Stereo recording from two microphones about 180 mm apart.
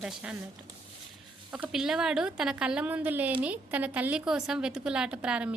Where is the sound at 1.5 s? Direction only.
5° right (ahead or behind).